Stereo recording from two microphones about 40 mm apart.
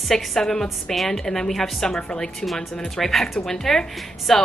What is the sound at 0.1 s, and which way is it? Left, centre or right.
A woman's voice, centre.